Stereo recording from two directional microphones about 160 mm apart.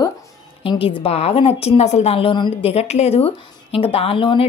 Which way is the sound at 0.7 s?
35° left (ahead or behind).